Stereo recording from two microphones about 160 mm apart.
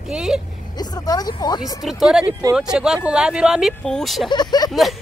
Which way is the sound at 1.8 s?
Centre (ahead or behind).